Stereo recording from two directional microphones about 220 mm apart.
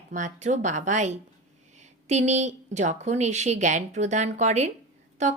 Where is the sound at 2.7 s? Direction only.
30° right (ahead or behind).